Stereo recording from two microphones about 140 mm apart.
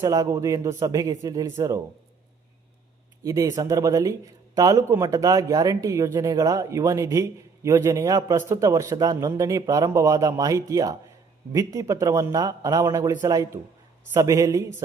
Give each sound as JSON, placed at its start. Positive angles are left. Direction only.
{"t": 0.0, "sound": "speech", "side_deg": -25}
{"t": 3.2, "sound": "speech", "side_deg": -20}